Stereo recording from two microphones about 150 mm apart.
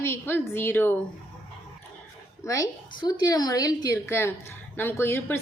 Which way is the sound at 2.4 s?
20° left (ahead or behind).